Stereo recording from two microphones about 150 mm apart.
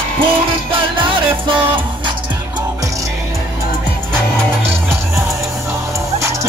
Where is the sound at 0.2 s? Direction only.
35° right (ahead or behind).